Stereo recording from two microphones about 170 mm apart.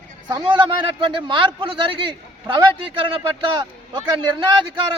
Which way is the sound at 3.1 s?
30° right (ahead or behind).